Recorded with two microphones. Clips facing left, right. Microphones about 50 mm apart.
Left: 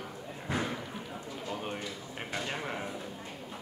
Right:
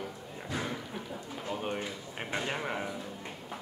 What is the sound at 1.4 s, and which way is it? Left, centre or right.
Speech, centre.